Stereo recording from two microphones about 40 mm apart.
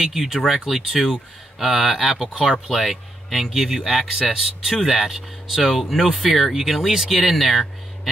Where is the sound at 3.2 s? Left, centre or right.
Centre.